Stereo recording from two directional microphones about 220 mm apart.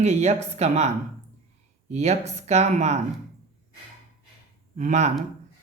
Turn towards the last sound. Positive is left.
turn(degrees=-30)  # may be behind; listen again after turning